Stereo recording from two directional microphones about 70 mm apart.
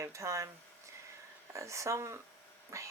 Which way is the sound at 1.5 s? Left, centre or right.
Right.